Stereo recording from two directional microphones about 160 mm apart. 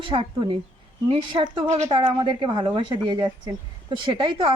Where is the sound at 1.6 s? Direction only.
45° right (ahead or behind).